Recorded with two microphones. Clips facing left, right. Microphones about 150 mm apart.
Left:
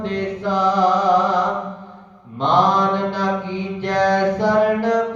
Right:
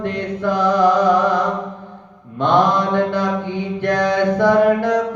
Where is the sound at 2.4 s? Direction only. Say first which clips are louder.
Right 1 dB; 55° right (ahead or behind).